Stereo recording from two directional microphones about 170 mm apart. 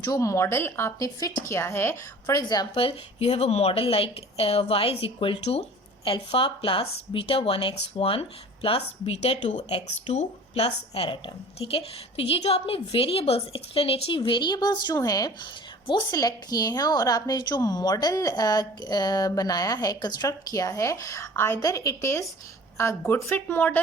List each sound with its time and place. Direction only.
0.0 s a woman's voice: 20° left (ahead or behind)